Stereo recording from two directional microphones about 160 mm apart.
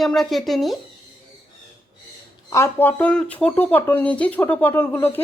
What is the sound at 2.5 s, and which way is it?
Speech, 15° left (ahead or behind).